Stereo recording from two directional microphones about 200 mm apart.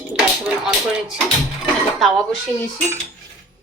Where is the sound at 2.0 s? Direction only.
Centre (ahead or behind).